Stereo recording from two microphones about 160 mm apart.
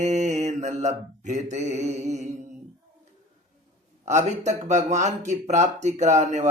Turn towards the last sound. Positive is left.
turn(degrees=-45)  # may be behind; listen again after turning